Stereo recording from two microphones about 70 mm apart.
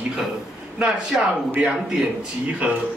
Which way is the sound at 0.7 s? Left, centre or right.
Centre.